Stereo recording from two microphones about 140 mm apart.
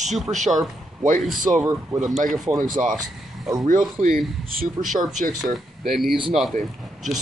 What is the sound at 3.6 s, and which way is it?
Speech, 65° right (ahead or behind).